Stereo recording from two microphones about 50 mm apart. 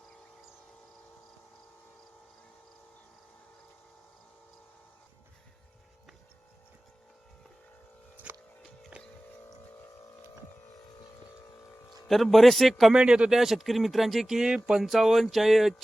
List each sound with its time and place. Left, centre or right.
8.3 s a sound: right
8.9 s music: right
11.9 s a man's voice: centre
12.9 s speech: centre
13.3 s speech: centre